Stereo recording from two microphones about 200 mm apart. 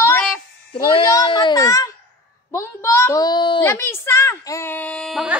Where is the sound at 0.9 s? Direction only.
25° left (ahead or behind).